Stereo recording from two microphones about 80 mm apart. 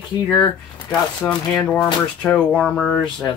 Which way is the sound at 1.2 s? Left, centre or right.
Centre.